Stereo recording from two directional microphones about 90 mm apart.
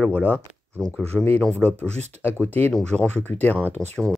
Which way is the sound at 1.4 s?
10° left (ahead or behind).